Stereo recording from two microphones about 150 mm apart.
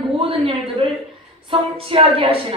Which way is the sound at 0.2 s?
40° right (ahead or behind).